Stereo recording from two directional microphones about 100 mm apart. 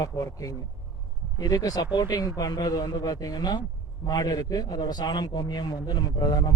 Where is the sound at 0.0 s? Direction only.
35° left (ahead or behind).